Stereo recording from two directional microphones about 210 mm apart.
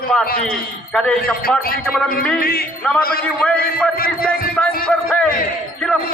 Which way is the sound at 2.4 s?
45° left (ahead or behind).